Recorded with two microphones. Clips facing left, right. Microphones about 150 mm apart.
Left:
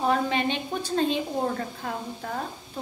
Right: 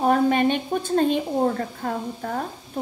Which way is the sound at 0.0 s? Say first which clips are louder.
Right 6 dB; 45° right (ahead or behind).